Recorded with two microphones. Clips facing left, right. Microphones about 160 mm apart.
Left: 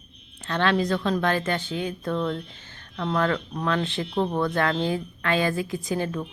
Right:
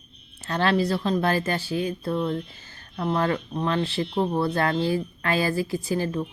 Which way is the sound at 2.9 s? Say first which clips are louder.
Even; 25° right (ahead or behind).